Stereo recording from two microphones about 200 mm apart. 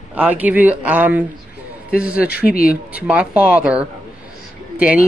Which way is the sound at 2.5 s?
45° left (ahead or behind).